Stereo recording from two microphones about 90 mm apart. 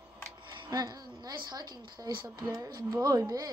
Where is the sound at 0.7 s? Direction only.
45° right (ahead or behind).